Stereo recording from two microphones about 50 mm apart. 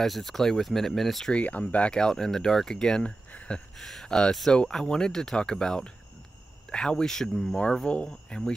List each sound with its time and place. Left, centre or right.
0.0 s speech: centre
1.3 s speech: left
2.0 s speech: centre
3.3 s a sound: centre
3.8 s speech: centre
7.8 s speech: centre